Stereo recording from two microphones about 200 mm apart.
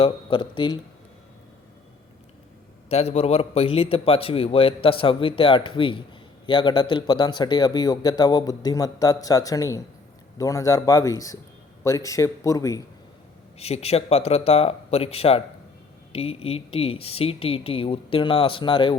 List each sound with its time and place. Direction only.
0.0 s a man's voice: 25° left (ahead or behind)
2.9 s a man's voice: 30° left (ahead or behind)
13.6 s a man's voice: 30° left (ahead or behind)